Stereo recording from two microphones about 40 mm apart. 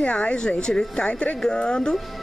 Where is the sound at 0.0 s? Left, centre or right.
Left.